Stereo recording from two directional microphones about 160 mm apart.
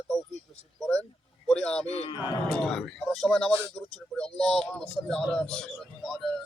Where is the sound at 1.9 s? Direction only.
40° left (ahead or behind).